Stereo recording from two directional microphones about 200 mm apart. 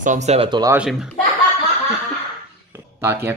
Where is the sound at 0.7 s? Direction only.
5° right (ahead or behind).